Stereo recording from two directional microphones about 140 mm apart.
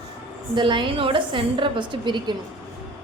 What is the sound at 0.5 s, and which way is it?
A woman's voice, 35° right (ahead or behind).